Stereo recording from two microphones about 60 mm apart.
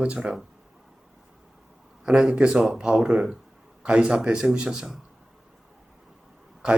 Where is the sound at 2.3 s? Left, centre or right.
Centre.